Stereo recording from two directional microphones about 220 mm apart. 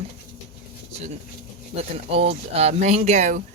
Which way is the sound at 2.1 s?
25° right (ahead or behind).